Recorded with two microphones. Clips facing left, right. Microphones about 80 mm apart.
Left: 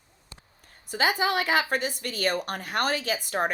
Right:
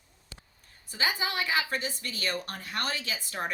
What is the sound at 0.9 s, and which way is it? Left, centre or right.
Speech, left.